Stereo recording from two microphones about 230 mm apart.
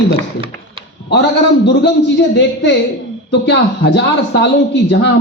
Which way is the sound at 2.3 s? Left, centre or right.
Left.